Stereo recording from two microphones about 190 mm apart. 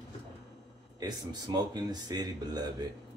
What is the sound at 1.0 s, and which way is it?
Speech, 20° right (ahead or behind).